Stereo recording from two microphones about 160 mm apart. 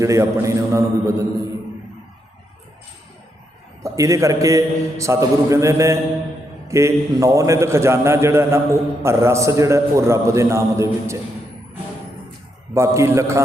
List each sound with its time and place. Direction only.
0.0 s a man's voice: 20° right (ahead or behind)
3.9 s a man's voice: 20° right (ahead or behind)
12.7 s a man's voice: 15° right (ahead or behind)